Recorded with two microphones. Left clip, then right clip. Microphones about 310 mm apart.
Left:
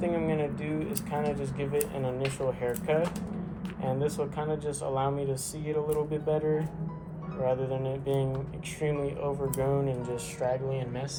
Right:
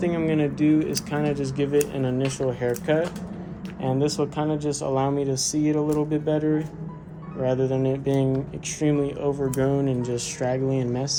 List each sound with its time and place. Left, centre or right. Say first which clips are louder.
0.0 s speech: right 5 dB; right